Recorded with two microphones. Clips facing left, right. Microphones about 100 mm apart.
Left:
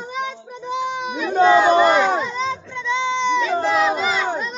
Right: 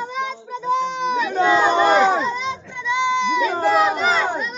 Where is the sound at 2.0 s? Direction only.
Centre (ahead or behind).